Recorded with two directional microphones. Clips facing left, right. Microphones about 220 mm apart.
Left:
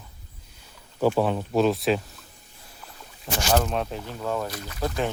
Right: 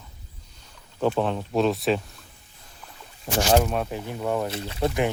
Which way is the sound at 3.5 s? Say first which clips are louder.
Right 2 dB; 10° right (ahead or behind).